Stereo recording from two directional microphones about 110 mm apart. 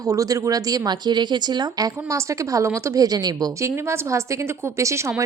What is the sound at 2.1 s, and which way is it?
A woman's voice, 30° right (ahead or behind).